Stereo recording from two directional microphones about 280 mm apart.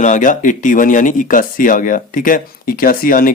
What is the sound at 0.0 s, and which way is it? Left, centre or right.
Speech, left.